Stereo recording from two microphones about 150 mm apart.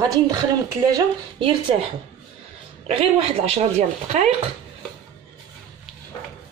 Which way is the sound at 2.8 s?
40° right (ahead or behind).